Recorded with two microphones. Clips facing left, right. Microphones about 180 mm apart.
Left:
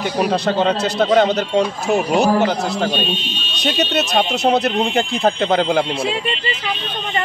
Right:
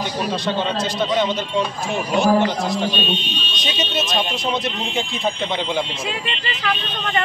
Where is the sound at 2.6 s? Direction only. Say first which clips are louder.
Left 2 dB; 65° left (ahead or behind).